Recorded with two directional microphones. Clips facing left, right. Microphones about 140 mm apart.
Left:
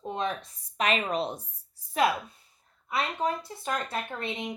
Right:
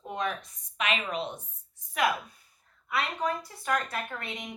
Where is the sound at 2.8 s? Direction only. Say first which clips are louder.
Left 1 dB; 25° left (ahead or behind).